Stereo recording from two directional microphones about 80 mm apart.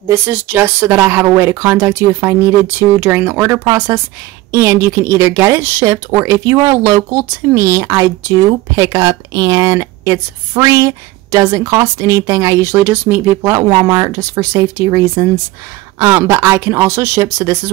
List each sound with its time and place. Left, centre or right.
0.1 s speech: right
13.5 s speech: right